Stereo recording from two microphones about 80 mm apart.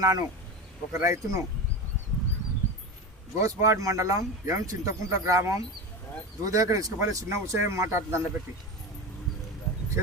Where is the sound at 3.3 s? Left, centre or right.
Right.